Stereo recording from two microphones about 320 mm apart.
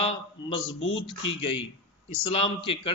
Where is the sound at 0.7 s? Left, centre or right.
Left.